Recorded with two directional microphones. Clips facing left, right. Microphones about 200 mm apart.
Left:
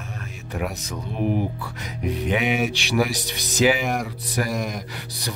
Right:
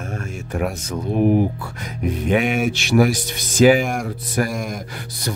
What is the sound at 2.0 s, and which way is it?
Speech, 50° right (ahead or behind).